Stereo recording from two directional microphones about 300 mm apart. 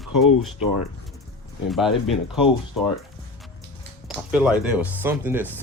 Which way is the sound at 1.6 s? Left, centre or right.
Centre.